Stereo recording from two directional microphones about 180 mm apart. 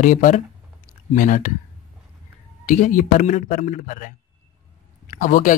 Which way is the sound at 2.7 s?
45° left (ahead or behind).